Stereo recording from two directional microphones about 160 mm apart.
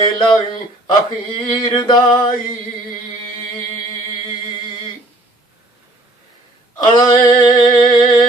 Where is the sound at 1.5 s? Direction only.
30° left (ahead or behind).